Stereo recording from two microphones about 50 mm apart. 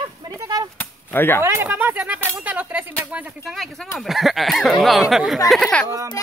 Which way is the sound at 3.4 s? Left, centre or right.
Centre.